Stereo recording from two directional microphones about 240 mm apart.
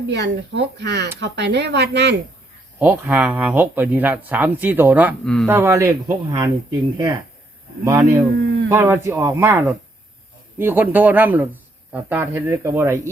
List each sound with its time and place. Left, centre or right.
0.1 s speech: right
2.7 s speech: centre
5.5 s speech: centre
7.9 s speech: centre